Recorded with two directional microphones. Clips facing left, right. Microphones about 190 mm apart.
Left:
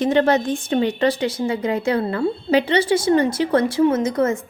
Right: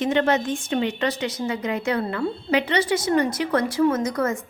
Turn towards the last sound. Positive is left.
turn(degrees=25)  # may be behind; listen again after turning